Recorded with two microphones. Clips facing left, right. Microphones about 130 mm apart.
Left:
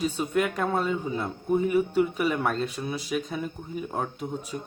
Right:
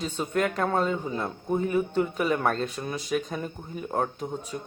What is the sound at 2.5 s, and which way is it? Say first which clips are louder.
Speech: left 1 dB; 40° right (ahead or behind).